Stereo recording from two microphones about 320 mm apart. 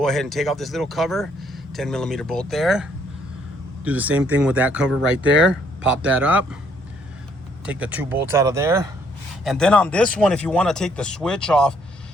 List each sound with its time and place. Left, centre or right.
0.0 s speech: centre
5.3 s speech: right
5.8 s speech: centre
7.6 s speech: centre